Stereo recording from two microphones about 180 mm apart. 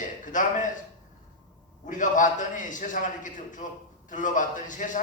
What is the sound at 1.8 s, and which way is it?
A man's voice, 45° left (ahead or behind).